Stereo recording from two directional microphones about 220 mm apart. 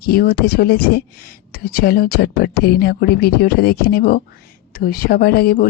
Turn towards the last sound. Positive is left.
turn(degrees=40)  # may be behind; listen again after turning